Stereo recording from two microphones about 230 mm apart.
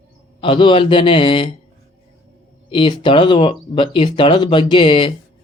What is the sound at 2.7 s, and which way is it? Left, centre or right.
Speech, left.